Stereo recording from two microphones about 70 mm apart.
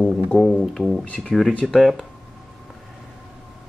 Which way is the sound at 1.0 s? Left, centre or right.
Centre.